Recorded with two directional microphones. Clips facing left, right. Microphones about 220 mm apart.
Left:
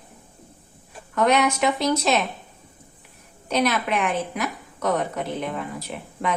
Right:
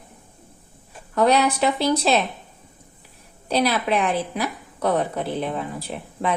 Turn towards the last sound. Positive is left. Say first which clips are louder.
# right 2 dB
turn(degrees=-30)  # may be behind; listen again after turning